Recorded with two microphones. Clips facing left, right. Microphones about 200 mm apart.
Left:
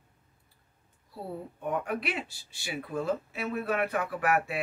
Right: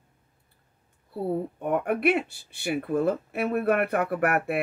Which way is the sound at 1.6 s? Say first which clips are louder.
Right 5 dB; 60° right (ahead or behind).